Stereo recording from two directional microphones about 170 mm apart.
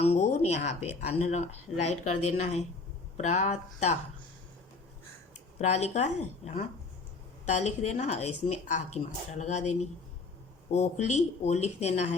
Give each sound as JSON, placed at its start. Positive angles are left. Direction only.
{"t": 0.0, "sound": "a woman's voice", "side_deg": 40}
{"t": 5.5, "sound": "a woman's voice", "side_deg": 40}